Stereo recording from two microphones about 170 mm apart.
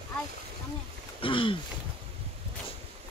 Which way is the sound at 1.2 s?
30° left (ahead or behind).